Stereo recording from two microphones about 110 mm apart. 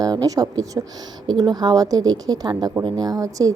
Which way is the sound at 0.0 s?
35° right (ahead or behind).